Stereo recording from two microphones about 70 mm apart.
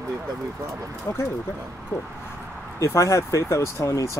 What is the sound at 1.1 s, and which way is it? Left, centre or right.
Speech, left.